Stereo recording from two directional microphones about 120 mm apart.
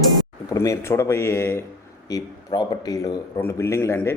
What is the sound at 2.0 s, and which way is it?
Speech, 30° left (ahead or behind).